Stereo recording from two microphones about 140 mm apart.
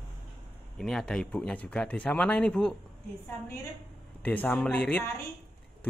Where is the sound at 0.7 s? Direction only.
5° left (ahead or behind).